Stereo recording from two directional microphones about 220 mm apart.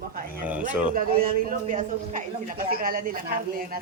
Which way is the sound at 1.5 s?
35° right (ahead or behind).